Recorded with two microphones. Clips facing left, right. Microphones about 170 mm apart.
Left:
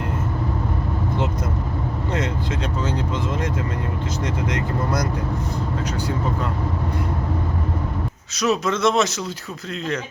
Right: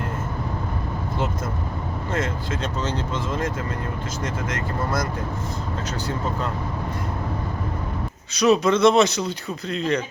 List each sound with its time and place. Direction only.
2.1 s speech: 20° left (ahead or behind)
8.4 s speech: centre (ahead or behind)